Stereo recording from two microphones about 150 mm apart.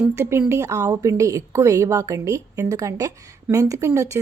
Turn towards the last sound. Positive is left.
turn(degrees=-20)  # may be behind; listen again after turning